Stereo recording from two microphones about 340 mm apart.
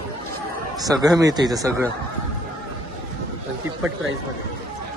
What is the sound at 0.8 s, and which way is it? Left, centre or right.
A man's voice, centre.